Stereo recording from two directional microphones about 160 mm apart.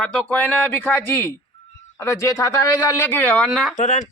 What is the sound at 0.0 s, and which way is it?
Speech, 10° left (ahead or behind).